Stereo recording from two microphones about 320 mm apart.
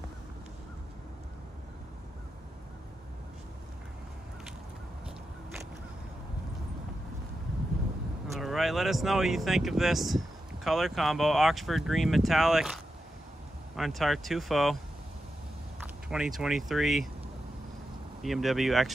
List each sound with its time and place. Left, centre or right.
8.3 s speech: centre
16.1 s speech: centre
18.2 s speech: centre